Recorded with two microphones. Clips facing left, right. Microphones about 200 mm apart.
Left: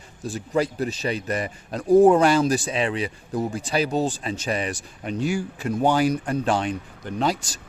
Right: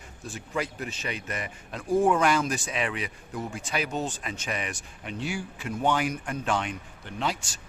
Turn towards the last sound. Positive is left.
turn(degrees=40)  # may be behind; listen again after turning